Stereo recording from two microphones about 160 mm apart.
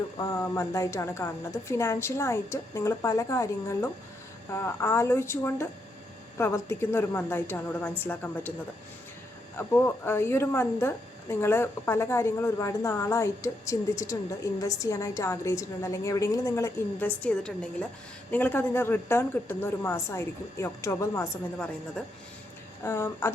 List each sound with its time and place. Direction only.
0.2 s a woman's voice: 20° left (ahead or behind)
9.6 s a woman's voice: 15° left (ahead or behind)
22.0 s a woman's voice: 5° left (ahead or behind)
22.8 s a woman's voice: 15° left (ahead or behind)